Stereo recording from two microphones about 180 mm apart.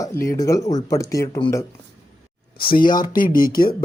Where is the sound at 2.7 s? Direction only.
50° left (ahead or behind).